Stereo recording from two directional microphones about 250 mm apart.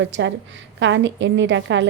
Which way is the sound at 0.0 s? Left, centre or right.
Right.